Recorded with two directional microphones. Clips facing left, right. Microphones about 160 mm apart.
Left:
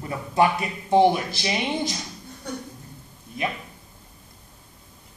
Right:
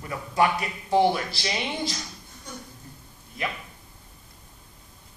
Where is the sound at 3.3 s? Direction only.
20° left (ahead or behind).